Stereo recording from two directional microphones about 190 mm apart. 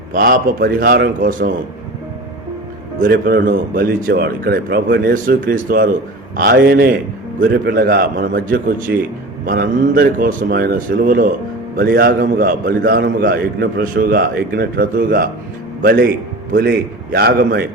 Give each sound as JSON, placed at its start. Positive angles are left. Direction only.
{"t": 0.1, "sound": "a man's voice", "side_deg": -50}
{"t": 3.0, "sound": "a man's voice", "side_deg": -50}
{"t": 9.5, "sound": "a man's voice", "side_deg": -50}